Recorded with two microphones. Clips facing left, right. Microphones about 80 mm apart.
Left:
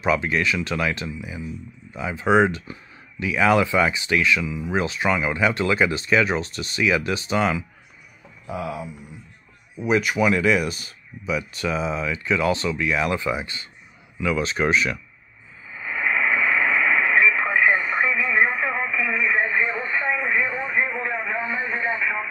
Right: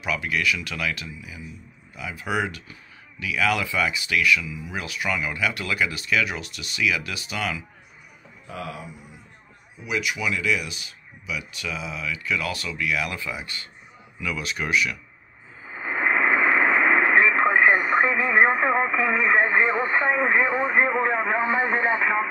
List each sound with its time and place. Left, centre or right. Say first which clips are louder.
0.0 s speech: left 4 dB; left
9.8 s speech: left 7 dB; left
15.6 s radio: right 1 dB; right
21.5 s radio: right 4 dB; right